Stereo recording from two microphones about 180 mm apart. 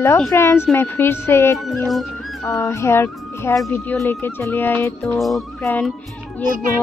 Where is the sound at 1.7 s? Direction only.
Centre (ahead or behind).